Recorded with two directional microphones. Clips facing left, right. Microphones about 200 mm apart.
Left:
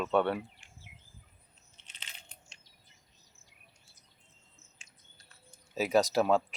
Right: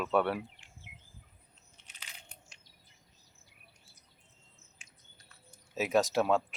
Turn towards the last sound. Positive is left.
turn(degrees=0)  # may be behind; listen again after turning